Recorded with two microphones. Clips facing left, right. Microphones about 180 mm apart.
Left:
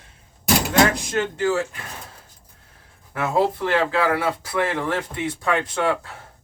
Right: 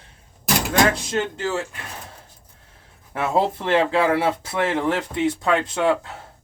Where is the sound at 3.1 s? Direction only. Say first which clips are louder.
Even; 25° right (ahead or behind).